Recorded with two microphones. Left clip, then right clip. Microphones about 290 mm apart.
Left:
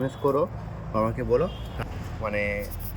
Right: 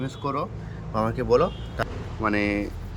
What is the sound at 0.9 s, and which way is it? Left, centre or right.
Speech, right.